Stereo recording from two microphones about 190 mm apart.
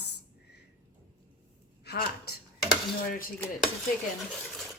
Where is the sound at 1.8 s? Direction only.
55° left (ahead or behind).